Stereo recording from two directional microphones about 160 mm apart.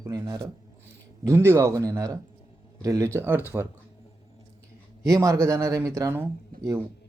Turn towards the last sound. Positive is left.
turn(degrees=-15)  # may be behind; listen again after turning